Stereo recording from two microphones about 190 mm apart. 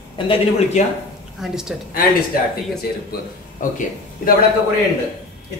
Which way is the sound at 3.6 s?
45° left (ahead or behind).